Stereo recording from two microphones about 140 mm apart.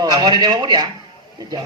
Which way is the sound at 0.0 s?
30° right (ahead or behind).